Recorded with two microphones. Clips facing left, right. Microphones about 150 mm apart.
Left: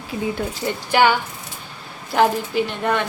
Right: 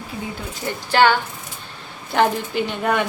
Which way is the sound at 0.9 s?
10° left (ahead or behind).